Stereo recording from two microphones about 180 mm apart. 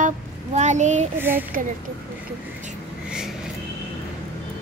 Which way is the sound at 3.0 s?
5° right (ahead or behind).